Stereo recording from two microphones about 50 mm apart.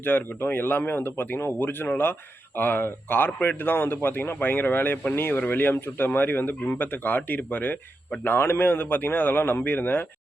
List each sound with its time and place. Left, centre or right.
0.0 s speech: left